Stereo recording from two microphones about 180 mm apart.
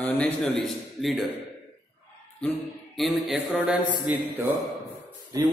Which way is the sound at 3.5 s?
10° right (ahead or behind).